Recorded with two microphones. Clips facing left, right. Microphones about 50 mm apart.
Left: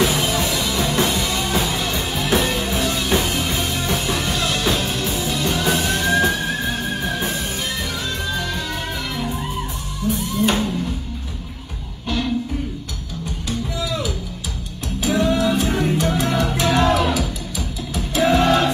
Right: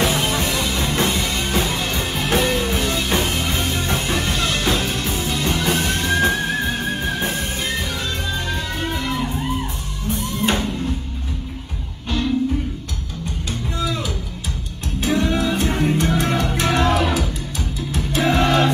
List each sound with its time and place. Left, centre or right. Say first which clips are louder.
0.0 s music: left 1 dB; right
10.0 s music: left 2 dB; right
13.5 s music: even; right